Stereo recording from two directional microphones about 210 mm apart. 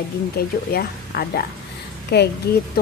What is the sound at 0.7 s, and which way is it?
Speech, 50° left (ahead or behind).